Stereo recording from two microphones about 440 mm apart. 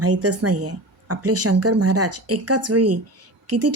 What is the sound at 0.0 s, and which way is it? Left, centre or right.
Speech, right.